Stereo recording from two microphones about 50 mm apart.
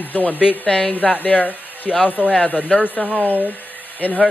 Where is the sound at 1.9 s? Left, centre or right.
Centre.